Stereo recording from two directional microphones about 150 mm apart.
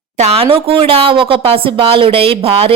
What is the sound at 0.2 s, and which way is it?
A woman's voice, 40° right (ahead or behind).